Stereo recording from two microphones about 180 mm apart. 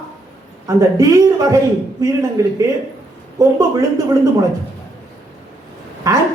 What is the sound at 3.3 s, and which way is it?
Speech, 20° right (ahead or behind).